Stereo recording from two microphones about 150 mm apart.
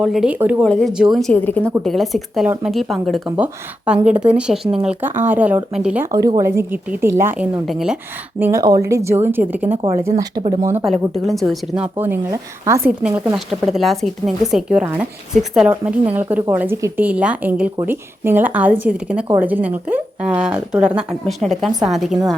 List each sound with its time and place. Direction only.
0.0 s a woman's voice: 5° right (ahead or behind)
3.2 s a woman's voice: 10° right (ahead or behind)
6.1 s a woman's voice: 25° right (ahead or behind)
7.7 s speech: 5° right (ahead or behind)
8.4 s a woman's voice: 20° right (ahead or behind)
11.2 s speech: centre (ahead or behind)
11.9 s a woman's voice: 15° right (ahead or behind)
13.0 s a woman's voice: 10° right (ahead or behind)